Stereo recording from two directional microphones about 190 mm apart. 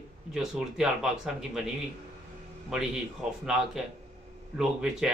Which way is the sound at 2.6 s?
Centre (ahead or behind).